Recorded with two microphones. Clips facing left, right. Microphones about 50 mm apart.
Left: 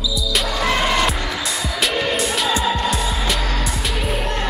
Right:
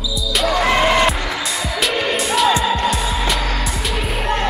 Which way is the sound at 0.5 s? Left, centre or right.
Centre.